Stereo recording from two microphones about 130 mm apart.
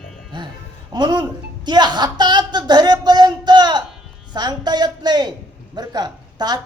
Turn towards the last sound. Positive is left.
turn(degrees=-30)  # may be behind; listen again after turning